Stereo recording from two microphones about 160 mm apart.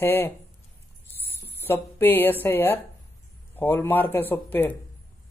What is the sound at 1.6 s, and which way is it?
A woman's voice, 15° left (ahead or behind).